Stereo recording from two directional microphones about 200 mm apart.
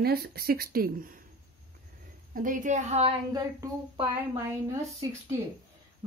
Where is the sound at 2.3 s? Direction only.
40° right (ahead or behind).